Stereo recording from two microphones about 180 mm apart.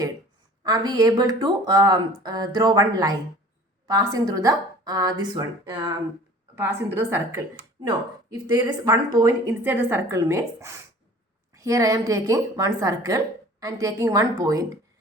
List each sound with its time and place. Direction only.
0.6 s a woman's voice: 20° right (ahead or behind)
8.4 s a woman's voice: 20° right (ahead or behind)